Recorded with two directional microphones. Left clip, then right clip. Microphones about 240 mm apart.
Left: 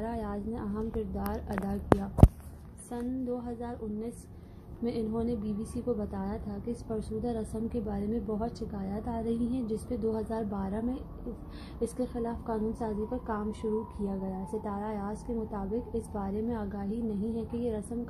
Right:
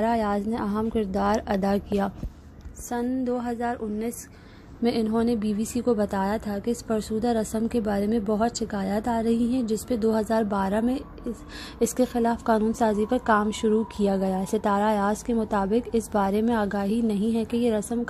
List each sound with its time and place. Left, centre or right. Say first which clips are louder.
0.0 s a woman's voice: right 12 dB; right
2.9 s a woman's voice: right 8 dB; right